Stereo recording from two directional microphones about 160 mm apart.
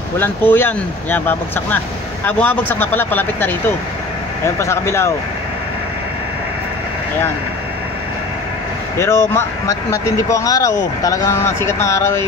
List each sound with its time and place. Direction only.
0.2 s speech: 15° left (ahead or behind)
4.6 s speech: 15° left (ahead or behind)
8.9 s speech: 15° left (ahead or behind)